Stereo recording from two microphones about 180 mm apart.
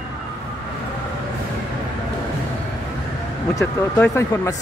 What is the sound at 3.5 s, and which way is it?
Speech, 15° left (ahead or behind).